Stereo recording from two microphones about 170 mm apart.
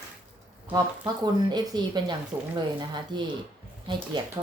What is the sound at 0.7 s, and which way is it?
Speech, 25° right (ahead or behind).